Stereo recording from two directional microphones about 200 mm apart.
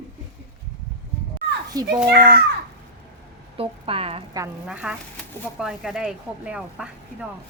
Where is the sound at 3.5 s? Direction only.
30° right (ahead or behind).